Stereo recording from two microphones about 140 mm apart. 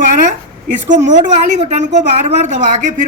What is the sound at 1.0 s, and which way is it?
A woman's voice, 60° right (ahead or behind).